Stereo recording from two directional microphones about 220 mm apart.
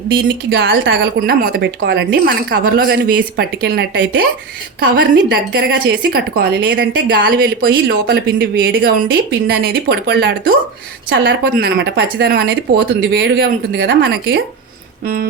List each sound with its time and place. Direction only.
0.5 s a woman's voice: 55° right (ahead or behind)